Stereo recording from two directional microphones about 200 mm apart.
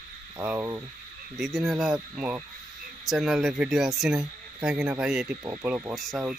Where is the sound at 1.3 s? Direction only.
Centre (ahead or behind).